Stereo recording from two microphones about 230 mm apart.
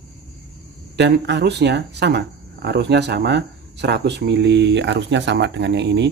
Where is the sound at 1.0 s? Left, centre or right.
Right.